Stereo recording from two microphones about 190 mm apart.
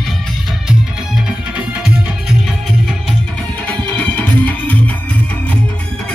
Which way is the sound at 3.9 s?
5° left (ahead or behind).